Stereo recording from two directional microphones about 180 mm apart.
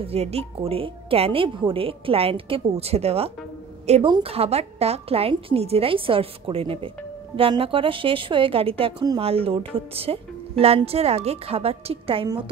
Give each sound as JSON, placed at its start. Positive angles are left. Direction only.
{"t": 0.0, "sound": "a woman's voice", "side_deg": -35}